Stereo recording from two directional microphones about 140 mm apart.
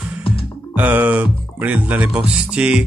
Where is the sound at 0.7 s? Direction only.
10° right (ahead or behind).